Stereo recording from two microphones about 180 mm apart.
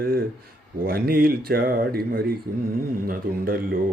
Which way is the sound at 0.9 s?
55° right (ahead or behind).